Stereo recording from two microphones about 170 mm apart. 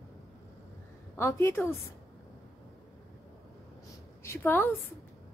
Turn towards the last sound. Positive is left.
turn(degrees=15)  # may be behind; listen again after turning